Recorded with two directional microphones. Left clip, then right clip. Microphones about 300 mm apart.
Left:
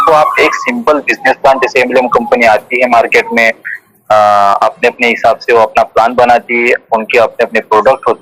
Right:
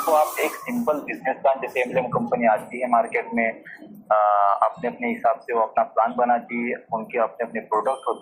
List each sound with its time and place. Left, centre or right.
0.0 s speech: left